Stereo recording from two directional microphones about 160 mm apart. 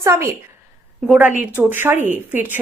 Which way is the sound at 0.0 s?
15° right (ahead or behind).